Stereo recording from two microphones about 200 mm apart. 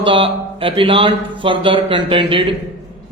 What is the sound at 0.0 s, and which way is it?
Speech, 25° right (ahead or behind).